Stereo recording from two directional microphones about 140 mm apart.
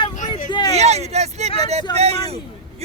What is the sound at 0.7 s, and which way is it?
Speech, 50° right (ahead or behind).